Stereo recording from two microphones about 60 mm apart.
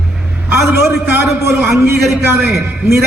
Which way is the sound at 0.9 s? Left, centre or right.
Right.